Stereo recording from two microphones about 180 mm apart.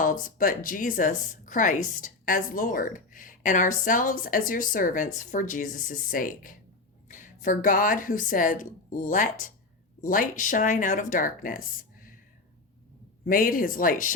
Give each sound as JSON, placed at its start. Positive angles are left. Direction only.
{"t": 0.0, "sound": "a woman's voice", "side_deg": 50}
{"t": 13.2, "sound": "a woman's voice", "side_deg": 50}